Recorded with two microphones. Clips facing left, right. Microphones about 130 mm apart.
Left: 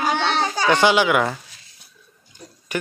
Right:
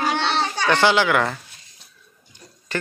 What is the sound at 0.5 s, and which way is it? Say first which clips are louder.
Speech: left 1 dB; 15° left (ahead or behind).